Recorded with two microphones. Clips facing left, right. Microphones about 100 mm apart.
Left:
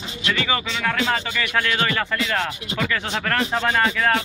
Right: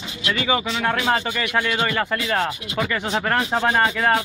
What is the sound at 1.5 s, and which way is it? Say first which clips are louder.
Speech: even; 15° right (ahead or behind).